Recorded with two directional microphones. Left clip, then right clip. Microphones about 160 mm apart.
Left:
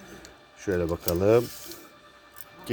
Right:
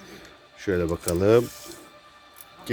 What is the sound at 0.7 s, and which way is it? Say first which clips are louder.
Speech: right 2 dB; 30° right (ahead or behind).